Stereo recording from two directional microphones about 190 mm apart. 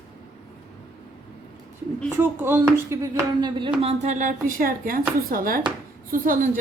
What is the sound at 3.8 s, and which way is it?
A woman's voice, 35° right (ahead or behind).